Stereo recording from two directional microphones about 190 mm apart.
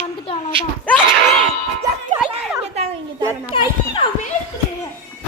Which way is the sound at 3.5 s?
25° left (ahead or behind).